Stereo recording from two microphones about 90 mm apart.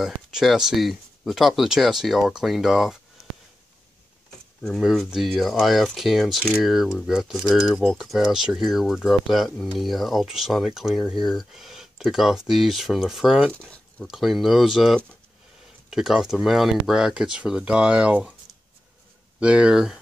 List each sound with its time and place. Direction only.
0.0 s speech: 5° right (ahead or behind)
3.2 s a sound: 40° left (ahead or behind)
4.6 s speech: centre (ahead or behind)
13.6 s a sound: 10° left (ahead or behind)
14.0 s speech: centre (ahead or behind)
19.4 s speech: 10° right (ahead or behind)